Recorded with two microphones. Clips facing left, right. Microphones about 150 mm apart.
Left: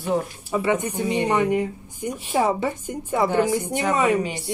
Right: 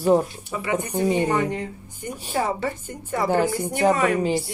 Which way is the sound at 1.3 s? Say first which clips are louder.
Left 3 dB; 10° left (ahead or behind).